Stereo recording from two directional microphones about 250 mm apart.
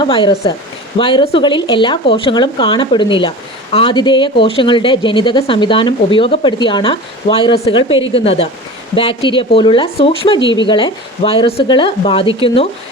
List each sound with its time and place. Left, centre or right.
0.0 s speech: centre